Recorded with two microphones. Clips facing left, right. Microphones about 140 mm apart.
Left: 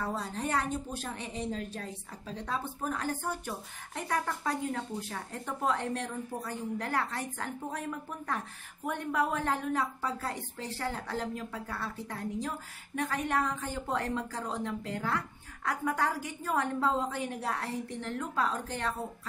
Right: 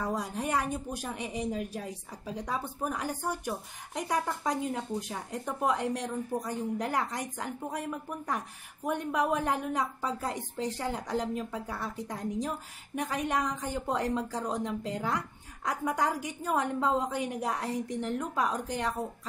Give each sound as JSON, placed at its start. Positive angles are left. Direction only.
{"t": 0.0, "sound": "a woman's voice", "side_deg": -15}